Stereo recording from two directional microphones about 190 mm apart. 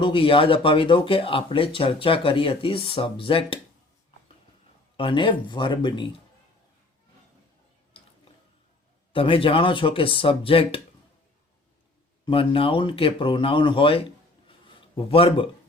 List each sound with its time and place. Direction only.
0.0 s speech: 25° left (ahead or behind)
4.9 s speech: 25° left (ahead or behind)
9.1 s speech: 30° left (ahead or behind)
12.2 s speech: 30° left (ahead or behind)